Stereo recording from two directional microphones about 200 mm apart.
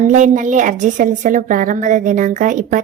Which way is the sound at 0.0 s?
40° right (ahead or behind).